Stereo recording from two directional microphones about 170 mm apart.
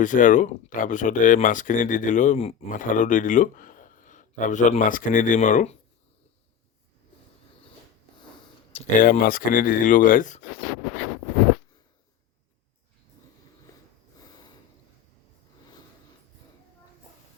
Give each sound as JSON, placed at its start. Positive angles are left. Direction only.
{"t": 0.0, "sound": "speech", "side_deg": 50}
{"t": 9.0, "sound": "speech", "side_deg": 55}